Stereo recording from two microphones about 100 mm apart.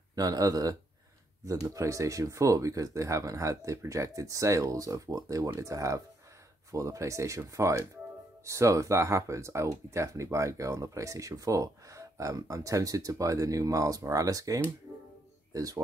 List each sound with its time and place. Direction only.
0.1 s speech: 35° right (ahead or behind)